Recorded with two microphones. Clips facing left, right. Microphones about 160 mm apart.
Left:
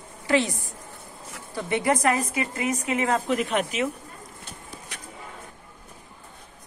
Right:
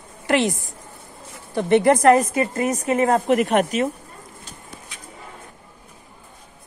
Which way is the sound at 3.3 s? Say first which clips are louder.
Right 7 dB; 60° right (ahead or behind).